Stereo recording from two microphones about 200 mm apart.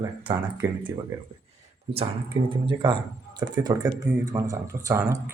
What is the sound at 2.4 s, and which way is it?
A man's voice, 25° right (ahead or behind).